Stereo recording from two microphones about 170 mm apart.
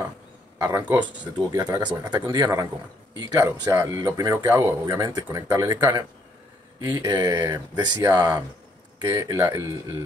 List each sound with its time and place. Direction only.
0.6 s speech: 20° right (ahead or behind)
1.5 s a man's voice: 20° right (ahead or behind)